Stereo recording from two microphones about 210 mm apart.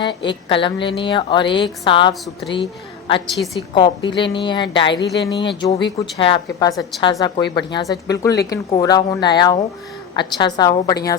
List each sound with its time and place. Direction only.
0.0 s a woman's voice: 20° left (ahead or behind)